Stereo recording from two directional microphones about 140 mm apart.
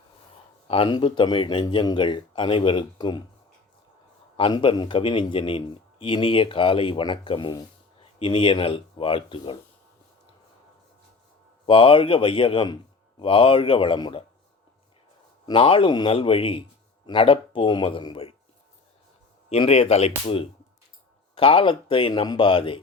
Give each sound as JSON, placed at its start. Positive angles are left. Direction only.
{"t": 0.7, "sound": "speech", "side_deg": 35}
{"t": 4.4, "sound": "speech", "side_deg": 35}
{"t": 11.6, "sound": "speech", "side_deg": 40}
{"t": 15.4, "sound": "speech", "side_deg": 40}
{"t": 19.5, "sound": "speech", "side_deg": 45}